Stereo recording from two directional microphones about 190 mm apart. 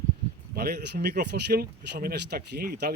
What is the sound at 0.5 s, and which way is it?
Speech, 55° right (ahead or behind).